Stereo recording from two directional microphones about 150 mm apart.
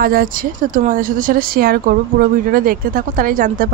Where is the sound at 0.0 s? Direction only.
75° right (ahead or behind).